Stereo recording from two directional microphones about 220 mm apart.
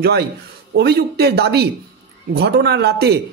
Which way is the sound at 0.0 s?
45° right (ahead or behind).